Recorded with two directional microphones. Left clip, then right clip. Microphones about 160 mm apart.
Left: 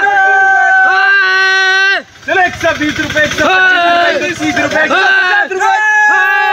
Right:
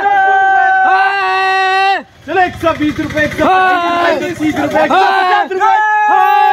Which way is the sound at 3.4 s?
90° right.